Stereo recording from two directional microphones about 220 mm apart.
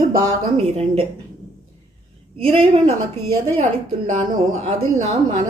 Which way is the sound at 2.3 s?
25° right (ahead or behind).